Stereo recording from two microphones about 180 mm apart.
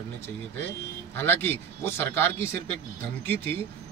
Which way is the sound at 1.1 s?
10° left (ahead or behind).